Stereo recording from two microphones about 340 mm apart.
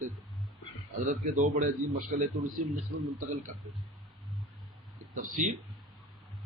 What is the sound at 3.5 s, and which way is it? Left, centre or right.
Speech, right.